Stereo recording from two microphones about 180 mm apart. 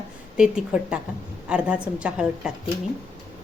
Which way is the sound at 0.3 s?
5° right (ahead or behind).